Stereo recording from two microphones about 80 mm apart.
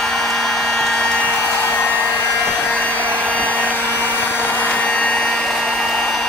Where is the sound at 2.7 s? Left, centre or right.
Centre.